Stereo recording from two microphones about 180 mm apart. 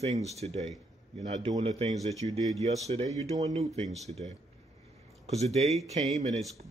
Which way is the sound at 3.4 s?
35° right (ahead or behind).